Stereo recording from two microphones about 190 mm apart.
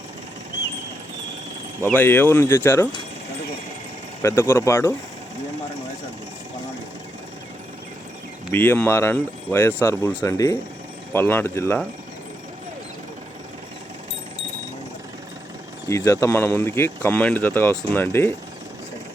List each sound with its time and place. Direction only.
1.8 s speech: 10° left (ahead or behind)
4.2 s speech: 15° left (ahead or behind)
8.5 s speech: 10° left (ahead or behind)
15.9 s speech: 15° left (ahead or behind)